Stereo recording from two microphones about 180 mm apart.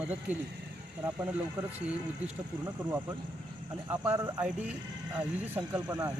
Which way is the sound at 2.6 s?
15° right (ahead or behind).